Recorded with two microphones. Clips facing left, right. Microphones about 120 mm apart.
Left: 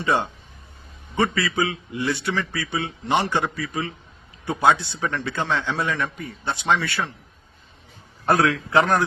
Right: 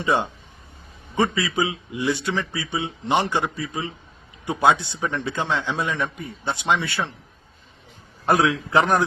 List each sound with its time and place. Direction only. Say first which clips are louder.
0.0 s a man's voice: even; 15° right (ahead or behind)
8.3 s a man's voice: even; 15° right (ahead or behind)